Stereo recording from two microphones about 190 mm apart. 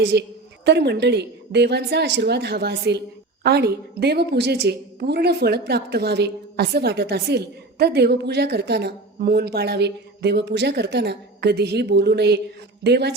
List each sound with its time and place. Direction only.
0.0 s a woman's voice: 60° right (ahead or behind)